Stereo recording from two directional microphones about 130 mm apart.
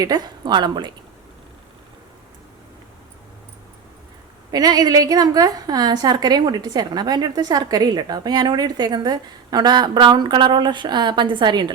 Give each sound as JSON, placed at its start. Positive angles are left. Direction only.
{"t": 0.0, "sound": "a woman's voice", "side_deg": -30}
{"t": 4.5, "sound": "a woman's voice", "side_deg": -30}